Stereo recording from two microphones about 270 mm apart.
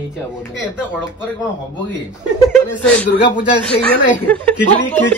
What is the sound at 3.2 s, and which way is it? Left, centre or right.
Speech, left.